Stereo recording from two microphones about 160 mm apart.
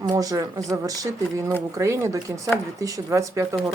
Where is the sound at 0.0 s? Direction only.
20° right (ahead or behind).